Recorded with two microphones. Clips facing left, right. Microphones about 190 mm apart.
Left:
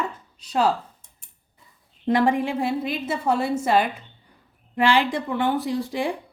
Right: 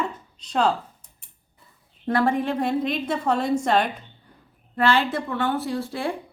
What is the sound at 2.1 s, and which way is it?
A woman's voice, 15° left (ahead or behind).